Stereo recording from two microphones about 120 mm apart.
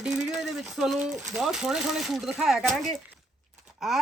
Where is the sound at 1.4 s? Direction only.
5° right (ahead or behind).